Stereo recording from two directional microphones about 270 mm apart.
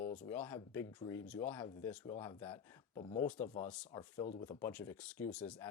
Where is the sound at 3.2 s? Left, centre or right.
Centre.